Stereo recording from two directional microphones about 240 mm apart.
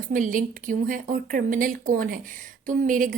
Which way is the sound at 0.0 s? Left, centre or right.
Right.